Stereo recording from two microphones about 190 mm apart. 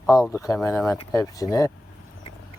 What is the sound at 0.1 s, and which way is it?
Speech, 15° left (ahead or behind).